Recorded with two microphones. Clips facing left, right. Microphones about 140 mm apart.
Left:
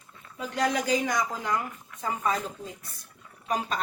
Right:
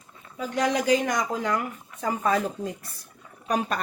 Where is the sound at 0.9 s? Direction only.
70° right (ahead or behind).